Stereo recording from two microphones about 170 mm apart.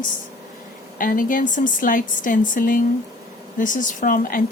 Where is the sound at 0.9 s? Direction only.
55° left (ahead or behind).